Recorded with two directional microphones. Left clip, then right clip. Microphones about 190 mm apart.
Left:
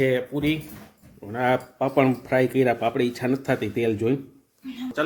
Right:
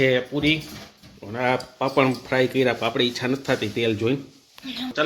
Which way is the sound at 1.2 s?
25° left (ahead or behind).